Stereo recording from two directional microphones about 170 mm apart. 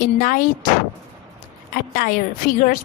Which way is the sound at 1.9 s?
55° left (ahead or behind).